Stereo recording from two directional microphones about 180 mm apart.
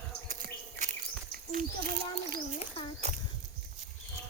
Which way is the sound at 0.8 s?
45° right (ahead or behind).